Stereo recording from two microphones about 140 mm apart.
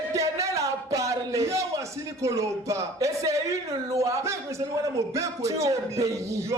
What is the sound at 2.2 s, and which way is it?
Speech, 20° right (ahead or behind).